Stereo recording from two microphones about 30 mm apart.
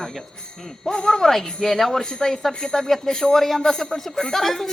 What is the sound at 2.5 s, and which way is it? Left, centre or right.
Speech, centre.